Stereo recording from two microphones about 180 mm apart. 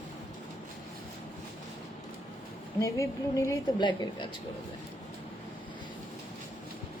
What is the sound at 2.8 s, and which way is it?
A woman's voice, 15° left (ahead or behind).